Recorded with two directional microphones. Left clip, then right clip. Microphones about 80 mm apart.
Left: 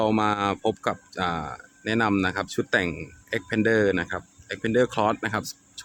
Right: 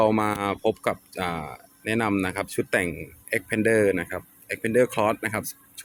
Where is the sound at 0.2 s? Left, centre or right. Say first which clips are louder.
Left 1 dB; centre.